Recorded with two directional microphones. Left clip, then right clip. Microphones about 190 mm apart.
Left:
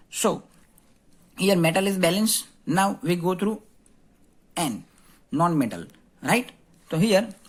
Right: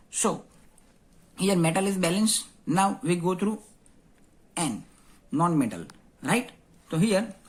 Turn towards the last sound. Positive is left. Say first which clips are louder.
# left 4 dB
turn(degrees=30)  # may be behind; listen again after turning